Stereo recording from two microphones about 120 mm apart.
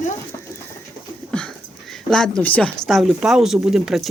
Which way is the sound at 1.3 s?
5° left (ahead or behind).